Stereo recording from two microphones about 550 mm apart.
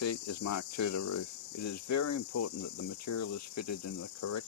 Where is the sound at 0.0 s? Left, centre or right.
Left.